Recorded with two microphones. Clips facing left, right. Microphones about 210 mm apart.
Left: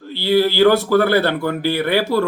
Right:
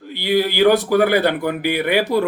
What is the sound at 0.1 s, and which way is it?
Speech, 15° right (ahead or behind).